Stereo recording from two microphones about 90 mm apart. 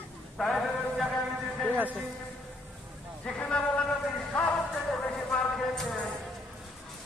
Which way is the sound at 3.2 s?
10° left (ahead or behind).